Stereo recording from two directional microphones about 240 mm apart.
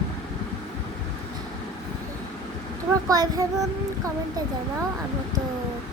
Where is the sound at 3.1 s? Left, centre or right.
Centre.